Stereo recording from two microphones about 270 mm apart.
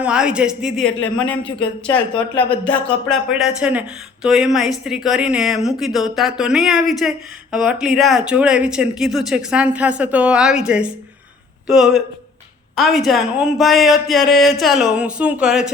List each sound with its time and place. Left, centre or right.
0.0 s speech: centre
1.4 s a man's voice: centre
2.3 s speech: centre